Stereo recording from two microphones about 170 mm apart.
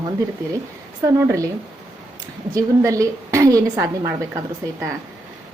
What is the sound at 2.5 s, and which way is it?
A woman's voice, 20° right (ahead or behind).